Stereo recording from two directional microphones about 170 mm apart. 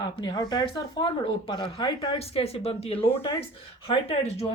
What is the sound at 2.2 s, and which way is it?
Speech, 35° left (ahead or behind).